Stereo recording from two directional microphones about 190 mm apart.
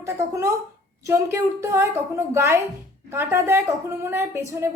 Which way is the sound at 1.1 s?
15° right (ahead or behind).